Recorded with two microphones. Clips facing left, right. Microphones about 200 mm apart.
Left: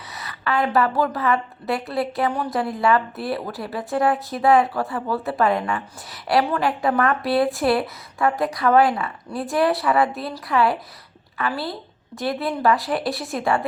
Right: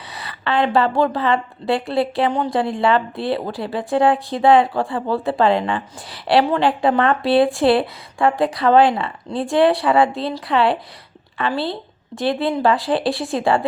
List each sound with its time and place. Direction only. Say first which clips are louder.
0.1 s speech: right 2 dB; 30° right (ahead or behind)